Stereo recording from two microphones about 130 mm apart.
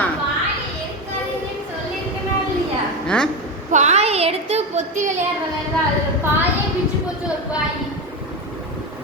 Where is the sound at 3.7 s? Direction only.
65° right (ahead or behind).